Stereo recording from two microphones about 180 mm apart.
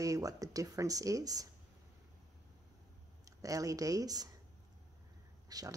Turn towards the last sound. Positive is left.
turn(degrees=-20)  # may be behind; listen again after turning